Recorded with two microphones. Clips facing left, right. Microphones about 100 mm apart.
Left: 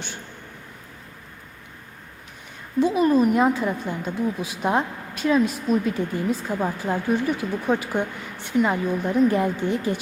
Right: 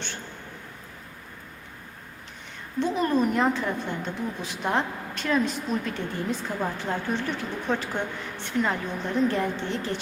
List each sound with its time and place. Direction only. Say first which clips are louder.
2.8 s speech: left 5 dB; 10° left (ahead or behind)